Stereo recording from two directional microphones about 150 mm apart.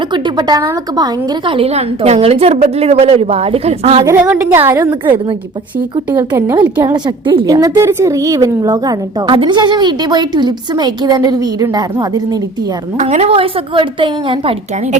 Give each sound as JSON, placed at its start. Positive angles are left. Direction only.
{"t": 0.1, "sound": "a woman's voice", "side_deg": -30}
{"t": 4.0, "sound": "a woman's voice", "side_deg": -15}
{"t": 6.1, "sound": "a woman's voice", "side_deg": -15}
{"t": 6.9, "sound": "a woman's voice", "side_deg": -35}
{"t": 13.0, "sound": "a woman's voice", "side_deg": -45}